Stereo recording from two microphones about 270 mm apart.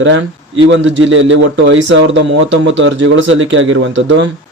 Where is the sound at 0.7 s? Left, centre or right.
Right.